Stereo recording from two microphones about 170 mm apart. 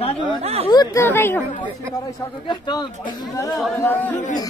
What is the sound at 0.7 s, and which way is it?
Speech, 25° left (ahead or behind).